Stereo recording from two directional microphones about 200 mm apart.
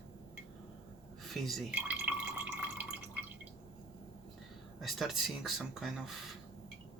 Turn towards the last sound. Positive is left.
turn(degrees=0)  # may be behind; listen again after turning